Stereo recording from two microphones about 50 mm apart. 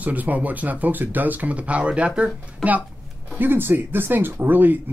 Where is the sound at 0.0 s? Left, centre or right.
Right.